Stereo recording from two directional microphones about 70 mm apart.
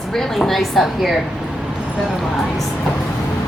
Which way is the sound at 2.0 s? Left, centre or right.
Centre.